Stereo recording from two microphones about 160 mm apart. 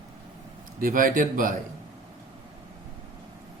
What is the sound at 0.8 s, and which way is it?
Speech, 60° right (ahead or behind).